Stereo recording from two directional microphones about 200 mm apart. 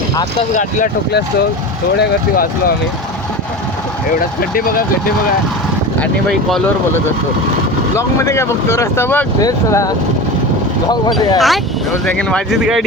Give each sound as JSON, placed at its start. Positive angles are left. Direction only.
{"t": 2.0, "sound": "speech", "side_deg": 50}
{"t": 4.4, "sound": "speech", "side_deg": 45}
{"t": 6.0, "sound": "speech", "side_deg": 5}
{"t": 11.3, "sound": "speech", "side_deg": 0}